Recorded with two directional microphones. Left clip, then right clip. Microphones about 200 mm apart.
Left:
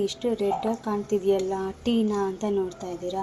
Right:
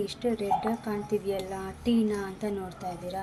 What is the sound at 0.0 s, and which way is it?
Speech, 20° left (ahead or behind).